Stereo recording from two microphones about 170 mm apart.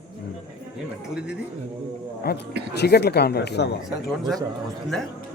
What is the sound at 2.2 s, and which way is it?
A man's voice, 70° left (ahead or behind).